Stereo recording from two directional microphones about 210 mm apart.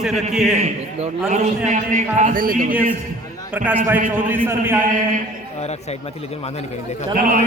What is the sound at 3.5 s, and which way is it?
A man's voice, 5° right (ahead or behind).